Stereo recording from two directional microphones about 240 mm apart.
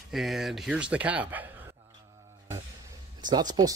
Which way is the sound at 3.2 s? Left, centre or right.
Centre.